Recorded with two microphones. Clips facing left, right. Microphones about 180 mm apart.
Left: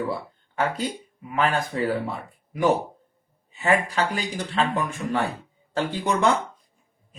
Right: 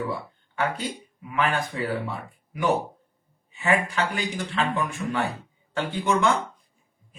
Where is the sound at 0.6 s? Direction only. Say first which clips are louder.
Left 2 dB; 40° left (ahead or behind).